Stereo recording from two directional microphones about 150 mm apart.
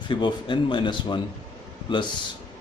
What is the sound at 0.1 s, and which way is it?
A man's voice, 30° left (ahead or behind).